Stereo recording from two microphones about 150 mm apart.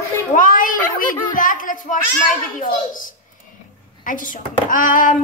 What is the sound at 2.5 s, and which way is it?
A woman's voice, 65° left (ahead or behind).